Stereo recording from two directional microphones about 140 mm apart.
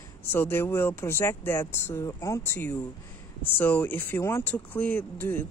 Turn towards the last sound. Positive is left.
turn(degrees=15)  # may be behind; listen again after turning